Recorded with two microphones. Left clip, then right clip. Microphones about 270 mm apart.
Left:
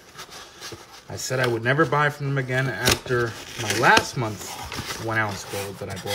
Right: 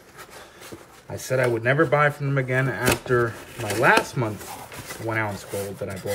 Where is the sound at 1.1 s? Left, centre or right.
Centre.